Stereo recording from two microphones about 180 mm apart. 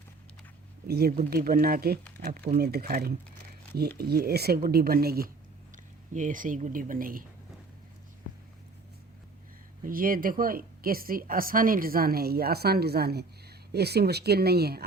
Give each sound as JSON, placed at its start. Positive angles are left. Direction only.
{"t": 0.9, "sound": "speech", "side_deg": -60}
{"t": 5.7, "sound": "speech", "side_deg": -45}
{"t": 9.8, "sound": "speech", "side_deg": -50}